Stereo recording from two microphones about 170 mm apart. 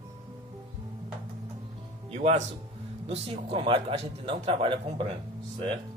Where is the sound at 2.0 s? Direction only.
35° right (ahead or behind).